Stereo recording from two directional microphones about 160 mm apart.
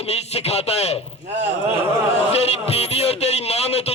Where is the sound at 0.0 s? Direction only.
40° left (ahead or behind).